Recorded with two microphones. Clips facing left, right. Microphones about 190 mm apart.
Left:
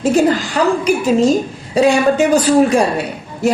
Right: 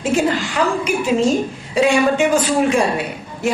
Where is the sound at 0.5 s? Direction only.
40° left (ahead or behind).